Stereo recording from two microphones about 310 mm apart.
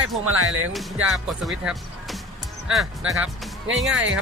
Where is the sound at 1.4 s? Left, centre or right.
Centre.